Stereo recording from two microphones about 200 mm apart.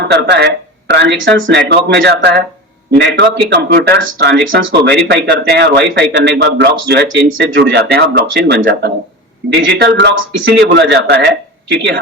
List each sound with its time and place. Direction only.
0.0 s speech: 55° right (ahead or behind)